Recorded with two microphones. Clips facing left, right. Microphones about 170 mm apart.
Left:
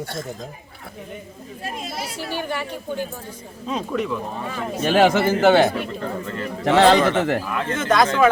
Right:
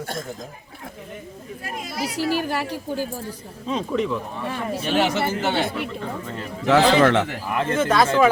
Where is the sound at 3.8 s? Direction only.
25° right (ahead or behind).